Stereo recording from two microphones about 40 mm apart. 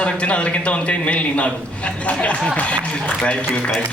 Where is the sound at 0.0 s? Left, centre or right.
Left.